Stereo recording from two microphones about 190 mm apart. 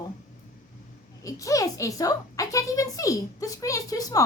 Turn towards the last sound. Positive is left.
turn(degrees=20)  # may be behind; listen again after turning